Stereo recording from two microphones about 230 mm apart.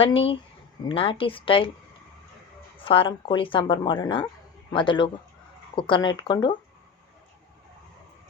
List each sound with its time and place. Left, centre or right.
0.0 s a woman's voice: left
2.8 s a woman's voice: left